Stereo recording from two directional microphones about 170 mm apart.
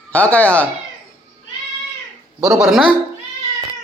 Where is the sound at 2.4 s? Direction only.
5° right (ahead or behind).